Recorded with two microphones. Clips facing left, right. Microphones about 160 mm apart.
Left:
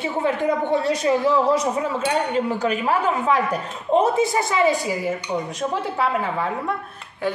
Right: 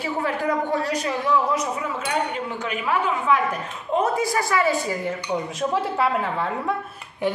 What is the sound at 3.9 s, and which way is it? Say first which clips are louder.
A woman's voice: left 4 dB; 25° left (ahead or behind).